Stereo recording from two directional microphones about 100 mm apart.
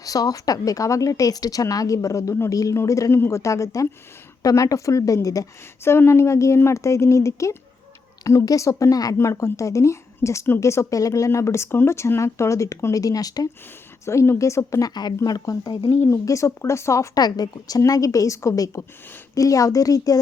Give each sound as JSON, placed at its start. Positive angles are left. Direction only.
{"t": 0.0, "sound": "speech", "side_deg": 35}
{"t": 14.0, "sound": "speech", "side_deg": 30}
{"t": 15.9, "sound": "speech", "side_deg": 25}